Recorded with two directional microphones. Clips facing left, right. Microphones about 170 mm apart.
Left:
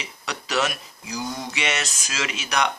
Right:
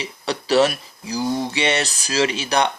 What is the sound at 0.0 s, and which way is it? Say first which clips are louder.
Speech: right 8 dB; 35° right (ahead or behind).